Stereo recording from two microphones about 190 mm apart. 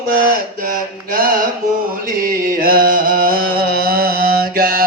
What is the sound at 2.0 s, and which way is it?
Music, 50° right (ahead or behind).